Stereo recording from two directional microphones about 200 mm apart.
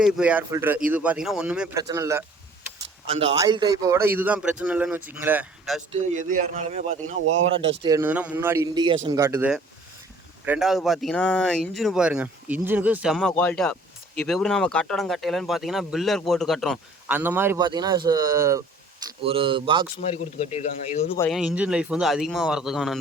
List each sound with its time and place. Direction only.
0.0 s a man's voice: 5° right (ahead or behind)
1.8 s a man's voice: 15° right (ahead or behind)
3.1 s a man's voice: 30° right (ahead or behind); by 5.8 s 5° right (ahead or behind)
5.9 s speech: 40° right (ahead or behind)
7.8 s a man's voice: 15° right (ahead or behind); by 17.2 s centre (ahead or behind)
17.2 s a man's voice: 10° right (ahead or behind)
19.0 s speech: 25° right (ahead or behind)
20.5 s speech: 35° left (ahead or behind)
21.2 s speech: 5° right (ahead or behind)